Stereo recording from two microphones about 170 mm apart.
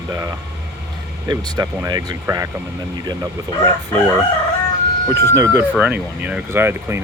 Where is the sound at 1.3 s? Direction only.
20° right (ahead or behind).